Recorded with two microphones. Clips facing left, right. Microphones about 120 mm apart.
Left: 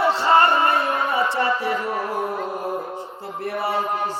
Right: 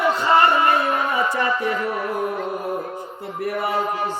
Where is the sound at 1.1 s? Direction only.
30° left (ahead or behind).